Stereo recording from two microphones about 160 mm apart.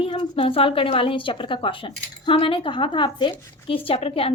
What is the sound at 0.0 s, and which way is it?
A woman's voice, 35° left (ahead or behind).